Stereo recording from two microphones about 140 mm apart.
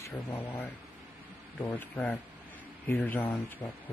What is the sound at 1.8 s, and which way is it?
Speech, 10° left (ahead or behind).